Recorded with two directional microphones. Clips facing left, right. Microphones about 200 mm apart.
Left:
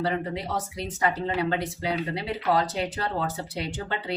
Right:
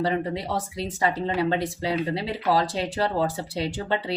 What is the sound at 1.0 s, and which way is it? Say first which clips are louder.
Speech: right 2 dB; 25° right (ahead or behind).